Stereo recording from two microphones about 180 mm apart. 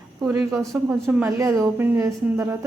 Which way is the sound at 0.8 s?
10° right (ahead or behind).